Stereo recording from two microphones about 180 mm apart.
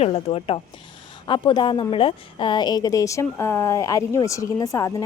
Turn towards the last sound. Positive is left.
turn(degrees=20)  # may be behind; listen again after turning